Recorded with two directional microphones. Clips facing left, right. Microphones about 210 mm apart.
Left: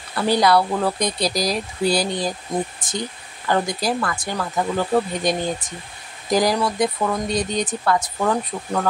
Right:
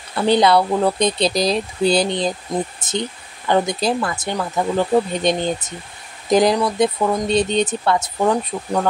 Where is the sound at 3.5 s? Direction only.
20° right (ahead or behind).